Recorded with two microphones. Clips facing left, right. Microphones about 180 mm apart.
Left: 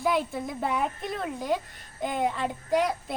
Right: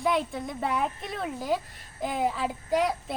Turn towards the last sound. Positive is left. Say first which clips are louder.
# even
turn(degrees=0)  # may be behind; listen again after turning